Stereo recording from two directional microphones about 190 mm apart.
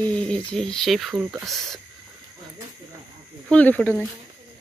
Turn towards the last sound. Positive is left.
turn(degrees=10)  # may be behind; listen again after turning